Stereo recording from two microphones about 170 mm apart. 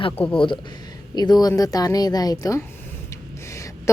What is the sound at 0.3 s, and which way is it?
A woman's voice, 30° left (ahead or behind).